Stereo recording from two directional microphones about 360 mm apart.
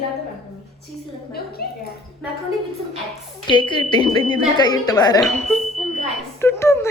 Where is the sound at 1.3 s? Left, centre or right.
Left.